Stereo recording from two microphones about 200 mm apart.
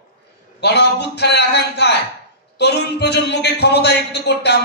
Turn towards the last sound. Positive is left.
turn(degrees=55)  # may be behind; listen again after turning